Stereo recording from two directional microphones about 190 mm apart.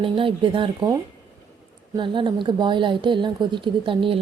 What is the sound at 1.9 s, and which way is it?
A woman's voice, 25° right (ahead or behind).